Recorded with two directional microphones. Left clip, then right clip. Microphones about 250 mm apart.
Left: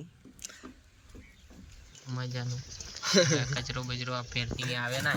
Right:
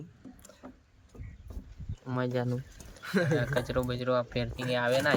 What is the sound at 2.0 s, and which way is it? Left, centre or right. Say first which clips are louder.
Speech: right 8 dB; right.